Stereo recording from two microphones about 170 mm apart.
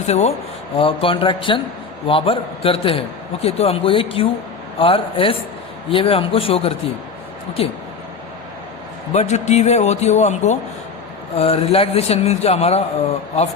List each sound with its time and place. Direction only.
0.0 s a man's voice: 40° left (ahead or behind)
9.1 s a man's voice: 40° left (ahead or behind)